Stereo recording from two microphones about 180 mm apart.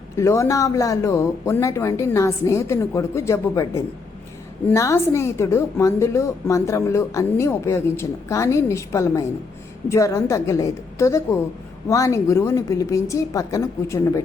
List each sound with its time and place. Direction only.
0.2 s a woman's voice: 15° left (ahead or behind)